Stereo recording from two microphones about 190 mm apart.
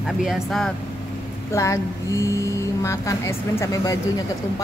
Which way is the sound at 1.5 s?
15° left (ahead or behind).